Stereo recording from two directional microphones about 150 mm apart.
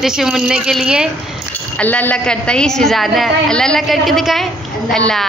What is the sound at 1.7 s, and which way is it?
A man's voice, 10° left (ahead or behind).